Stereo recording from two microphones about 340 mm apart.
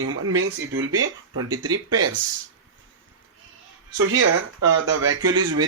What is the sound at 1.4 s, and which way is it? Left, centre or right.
Speech, centre.